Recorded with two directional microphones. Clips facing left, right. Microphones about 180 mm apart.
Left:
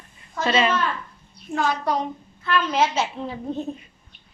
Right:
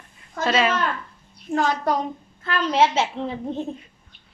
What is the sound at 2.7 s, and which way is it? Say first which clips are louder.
Speech: right 5 dB; 25° right (ahead or behind).